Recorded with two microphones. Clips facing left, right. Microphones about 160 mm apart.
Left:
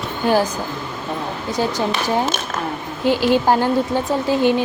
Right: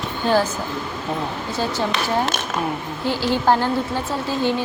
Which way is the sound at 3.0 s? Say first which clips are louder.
Left 4 dB; 15° left (ahead or behind).